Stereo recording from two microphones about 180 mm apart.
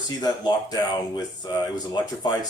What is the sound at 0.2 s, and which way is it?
Speech, 20° left (ahead or behind).